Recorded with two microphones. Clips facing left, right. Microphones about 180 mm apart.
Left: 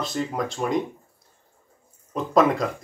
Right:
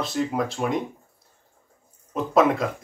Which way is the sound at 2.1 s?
Centre (ahead or behind).